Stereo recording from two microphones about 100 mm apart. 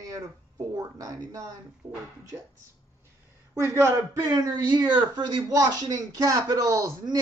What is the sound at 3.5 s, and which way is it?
Speech, 30° right (ahead or behind).